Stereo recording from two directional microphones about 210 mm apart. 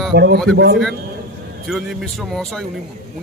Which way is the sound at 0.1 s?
50° right (ahead or behind).